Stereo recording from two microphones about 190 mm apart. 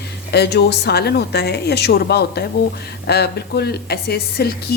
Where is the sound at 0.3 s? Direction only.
60° left (ahead or behind).